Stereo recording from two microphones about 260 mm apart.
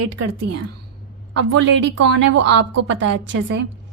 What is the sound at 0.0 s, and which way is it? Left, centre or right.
Speech, right.